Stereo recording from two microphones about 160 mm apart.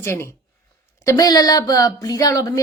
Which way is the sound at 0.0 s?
15° left (ahead or behind).